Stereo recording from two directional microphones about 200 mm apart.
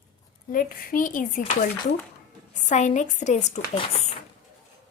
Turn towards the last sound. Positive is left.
turn(degrees=30)  # may be behind; listen again after turning